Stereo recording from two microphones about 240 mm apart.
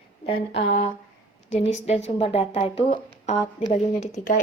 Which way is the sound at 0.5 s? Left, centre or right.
Left.